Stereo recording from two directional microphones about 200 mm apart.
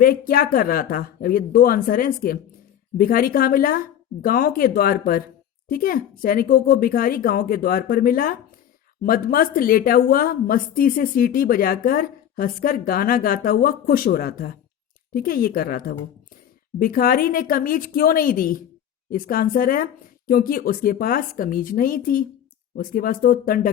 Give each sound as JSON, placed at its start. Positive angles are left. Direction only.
{"t": 0.0, "sound": "a woman's voice", "side_deg": 45}